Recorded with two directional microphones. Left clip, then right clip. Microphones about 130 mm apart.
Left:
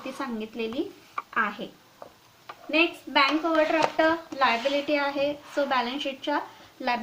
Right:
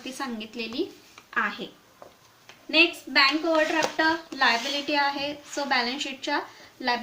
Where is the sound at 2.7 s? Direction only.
35° left (ahead or behind).